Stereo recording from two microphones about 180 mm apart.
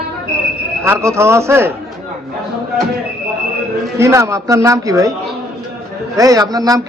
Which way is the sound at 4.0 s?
15° right (ahead or behind).